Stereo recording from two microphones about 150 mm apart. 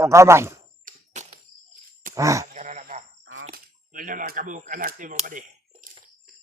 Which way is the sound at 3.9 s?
60° right (ahead or behind).